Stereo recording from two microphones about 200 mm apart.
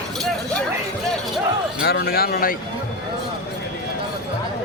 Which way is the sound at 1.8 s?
55° left (ahead or behind).